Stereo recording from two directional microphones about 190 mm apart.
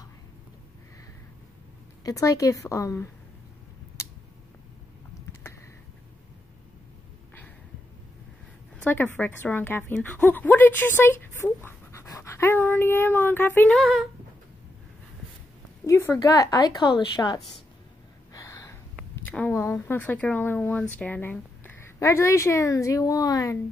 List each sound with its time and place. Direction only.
2.0 s a woman's voice: 20° left (ahead or behind)
8.7 s a woman's voice: 10° left (ahead or behind)
15.8 s a woman's voice: 15° left (ahead or behind)
18.3 s gasp: 15° left (ahead or behind)
19.2 s a woman's voice: 10° left (ahead or behind)